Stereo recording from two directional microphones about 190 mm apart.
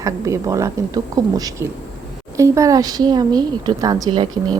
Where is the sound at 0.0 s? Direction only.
15° right (ahead or behind).